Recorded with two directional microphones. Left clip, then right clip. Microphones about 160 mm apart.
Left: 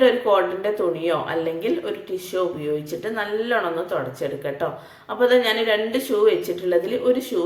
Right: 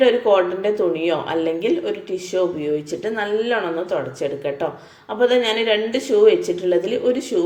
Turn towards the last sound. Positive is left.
turn(degrees=-10)  # may be behind; listen again after turning